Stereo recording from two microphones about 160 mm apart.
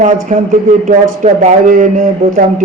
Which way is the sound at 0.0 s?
50° right (ahead or behind).